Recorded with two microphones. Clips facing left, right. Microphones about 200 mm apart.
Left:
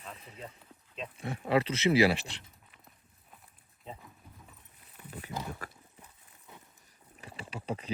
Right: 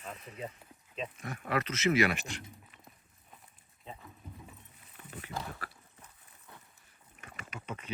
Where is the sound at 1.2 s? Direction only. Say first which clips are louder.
Left 6 dB; 30° left (ahead or behind).